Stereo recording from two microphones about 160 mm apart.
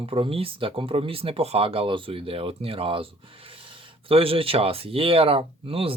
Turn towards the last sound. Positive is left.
turn(degrees=-35)  # may be behind; listen again after turning